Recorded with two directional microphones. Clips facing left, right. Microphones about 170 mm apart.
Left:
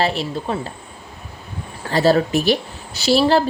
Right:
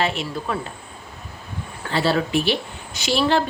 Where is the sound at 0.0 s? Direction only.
35° left (ahead or behind).